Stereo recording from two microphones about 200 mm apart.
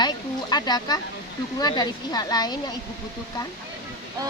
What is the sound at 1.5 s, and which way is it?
Speech, 20° left (ahead or behind).